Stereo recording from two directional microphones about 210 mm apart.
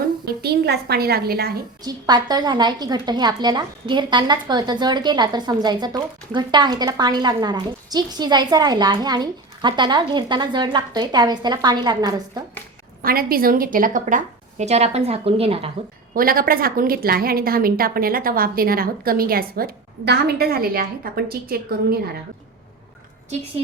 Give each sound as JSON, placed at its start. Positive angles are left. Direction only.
{"t": 0.4, "sound": "a woman's voice", "side_deg": -50}
{"t": 1.8, "sound": "a woman's voice", "side_deg": -20}
{"t": 13.0, "sound": "a woman's voice", "side_deg": -45}
{"t": 16.1, "sound": "a woman's voice", "side_deg": -45}